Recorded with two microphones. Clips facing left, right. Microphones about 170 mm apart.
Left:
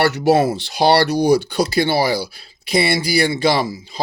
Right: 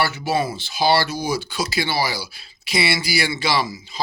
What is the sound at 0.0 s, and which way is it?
Speech, 70° left (ahead or behind).